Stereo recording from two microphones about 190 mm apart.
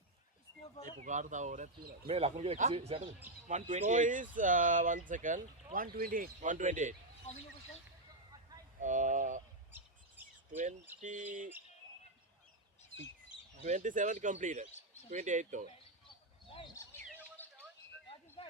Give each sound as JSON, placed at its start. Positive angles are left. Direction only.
{"t": 0.9, "sound": "speech", "side_deg": -40}
{"t": 7.3, "sound": "speech", "side_deg": 35}
{"t": 8.8, "sound": "speech", "side_deg": -40}
{"t": 9.7, "sound": "chirp", "side_deg": -10}
{"t": 11.0, "sound": "speech", "side_deg": -40}
{"t": 13.7, "sound": "speech", "side_deg": -40}
{"t": 17.4, "sound": "a sound", "side_deg": 10}